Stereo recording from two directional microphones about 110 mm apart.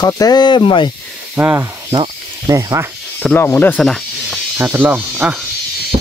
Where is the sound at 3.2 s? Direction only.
20° left (ahead or behind).